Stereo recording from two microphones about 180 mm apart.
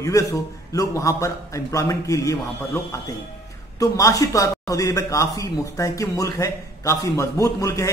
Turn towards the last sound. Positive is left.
turn(degrees=15)  # may be behind; listen again after turning